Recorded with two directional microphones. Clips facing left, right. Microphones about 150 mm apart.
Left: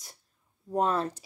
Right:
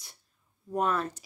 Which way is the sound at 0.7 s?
30° left (ahead or behind).